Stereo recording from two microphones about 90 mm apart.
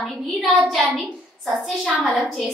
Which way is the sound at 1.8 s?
10° right (ahead or behind).